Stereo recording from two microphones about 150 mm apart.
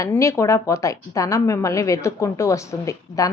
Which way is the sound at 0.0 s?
20° left (ahead or behind).